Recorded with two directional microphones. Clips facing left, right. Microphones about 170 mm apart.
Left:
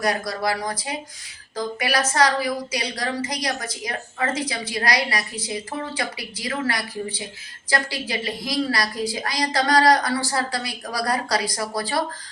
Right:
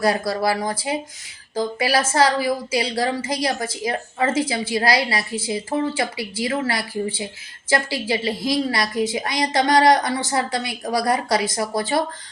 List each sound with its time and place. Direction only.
0.0 s a woman's voice: 30° right (ahead or behind)